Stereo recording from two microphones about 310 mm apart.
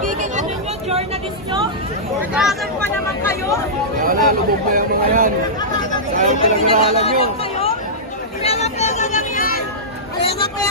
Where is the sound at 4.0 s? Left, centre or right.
Right.